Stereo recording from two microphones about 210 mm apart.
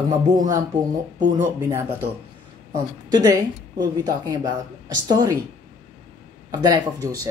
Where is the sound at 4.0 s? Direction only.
15° right (ahead or behind).